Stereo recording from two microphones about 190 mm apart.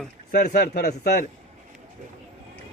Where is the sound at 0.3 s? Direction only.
55° left (ahead or behind).